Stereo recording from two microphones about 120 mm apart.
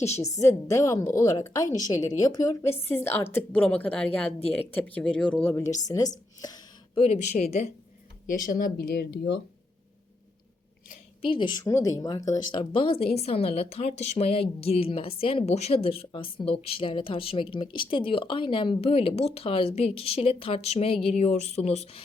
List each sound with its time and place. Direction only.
0.2 s a woman's voice: 25° left (ahead or behind)
2.9 s a woman's voice: 20° left (ahead or behind)
5.8 s speech: 30° left (ahead or behind)
6.9 s speech: 60° left (ahead or behind)
11.2 s a woman's voice: 45° left (ahead or behind)
11.6 s a woman's voice: 25° left (ahead or behind)
12.5 s a woman's voice: 50° left (ahead or behind); by 22.0 s 65° left (ahead or behind)